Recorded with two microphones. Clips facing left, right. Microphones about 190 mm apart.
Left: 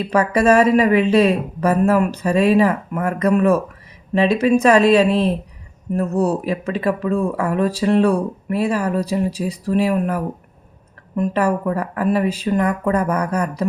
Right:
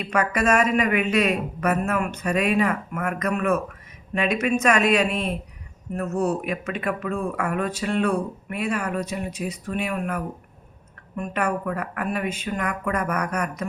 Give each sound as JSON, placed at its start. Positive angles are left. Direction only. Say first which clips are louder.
{"t": 0.0, "sound": "speech", "louder": "left 7 dB", "side_deg": 30}